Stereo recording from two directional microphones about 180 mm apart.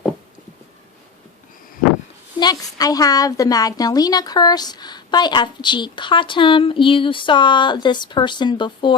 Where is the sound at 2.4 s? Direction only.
20° left (ahead or behind).